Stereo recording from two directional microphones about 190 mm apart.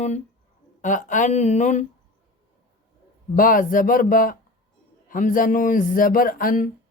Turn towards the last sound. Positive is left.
turn(degrees=45)  # may be behind; listen again after turning